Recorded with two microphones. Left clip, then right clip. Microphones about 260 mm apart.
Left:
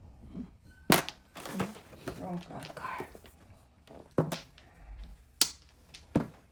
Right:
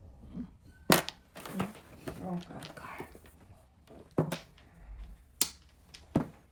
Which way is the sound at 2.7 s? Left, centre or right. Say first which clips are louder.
Left 8 dB; left.